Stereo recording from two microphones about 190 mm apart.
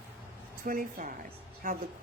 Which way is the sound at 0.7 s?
45° right (ahead or behind).